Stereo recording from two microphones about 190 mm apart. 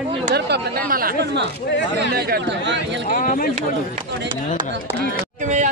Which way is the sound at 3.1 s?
45° left (ahead or behind).